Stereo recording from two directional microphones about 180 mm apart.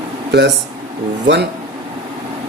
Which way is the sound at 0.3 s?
70° right (ahead or behind).